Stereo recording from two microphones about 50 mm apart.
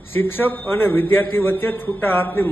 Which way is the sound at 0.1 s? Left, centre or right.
Left.